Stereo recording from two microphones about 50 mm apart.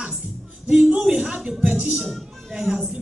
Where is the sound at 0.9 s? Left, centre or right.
Centre.